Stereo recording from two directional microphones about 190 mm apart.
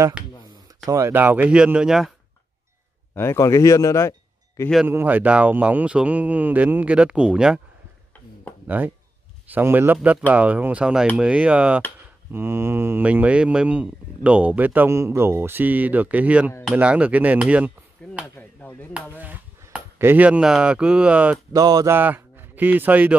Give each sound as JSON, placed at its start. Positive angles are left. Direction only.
{"t": 0.2, "sound": "a sound", "side_deg": -5}
{"t": 0.8, "sound": "speech", "side_deg": -15}
{"t": 3.2, "sound": "speech", "side_deg": 15}
{"t": 4.8, "sound": "speech", "side_deg": -10}
{"t": 8.6, "sound": "speech", "side_deg": -10}
{"t": 18.2, "sound": "speech", "side_deg": 10}
{"t": 19.1, "sound": "speech", "side_deg": -10}
{"t": 21.5, "sound": "speech", "side_deg": -20}